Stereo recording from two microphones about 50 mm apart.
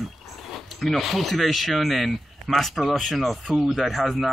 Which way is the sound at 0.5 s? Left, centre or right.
Centre.